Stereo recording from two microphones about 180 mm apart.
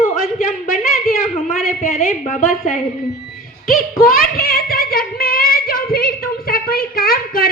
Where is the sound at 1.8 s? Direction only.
40° left (ahead or behind).